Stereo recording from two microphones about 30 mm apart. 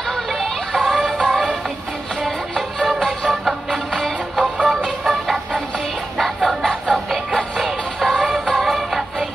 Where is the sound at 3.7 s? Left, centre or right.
Centre.